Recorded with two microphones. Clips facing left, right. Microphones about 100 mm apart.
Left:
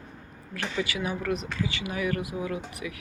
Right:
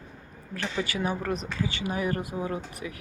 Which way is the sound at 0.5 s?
35° right (ahead or behind).